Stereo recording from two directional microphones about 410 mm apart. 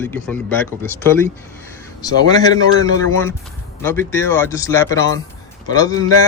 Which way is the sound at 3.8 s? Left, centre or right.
Centre.